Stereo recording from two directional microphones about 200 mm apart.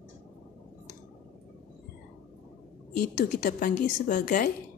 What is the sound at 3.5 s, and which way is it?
A woman's voice, 40° left (ahead or behind).